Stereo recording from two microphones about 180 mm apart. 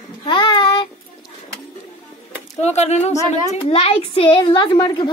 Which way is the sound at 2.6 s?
40° left (ahead or behind).